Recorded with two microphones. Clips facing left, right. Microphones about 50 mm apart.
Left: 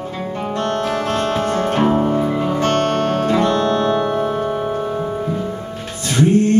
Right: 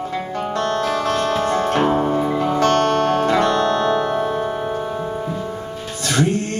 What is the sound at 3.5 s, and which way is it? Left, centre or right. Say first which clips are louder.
Music: left 1 dB; centre.